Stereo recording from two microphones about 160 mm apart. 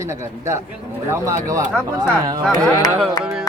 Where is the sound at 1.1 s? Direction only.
20° right (ahead or behind).